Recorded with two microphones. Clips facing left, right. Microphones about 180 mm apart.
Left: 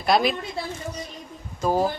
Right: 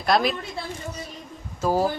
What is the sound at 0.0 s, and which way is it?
Speech, centre (ahead or behind).